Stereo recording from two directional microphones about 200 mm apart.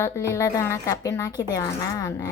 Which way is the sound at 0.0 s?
15° left (ahead or behind).